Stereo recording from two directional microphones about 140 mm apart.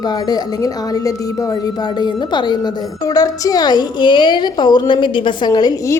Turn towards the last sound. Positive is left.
turn(degrees=25)  # may be behind; listen again after turning